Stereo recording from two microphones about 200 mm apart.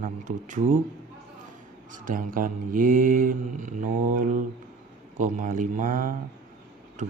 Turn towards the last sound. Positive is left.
turn(degrees=-40)  # may be behind; listen again after turning